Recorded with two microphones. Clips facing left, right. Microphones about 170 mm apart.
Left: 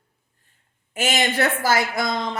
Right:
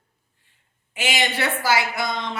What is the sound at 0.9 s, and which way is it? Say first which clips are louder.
A woman's voice: left 3 dB; 45° left (ahead or behind).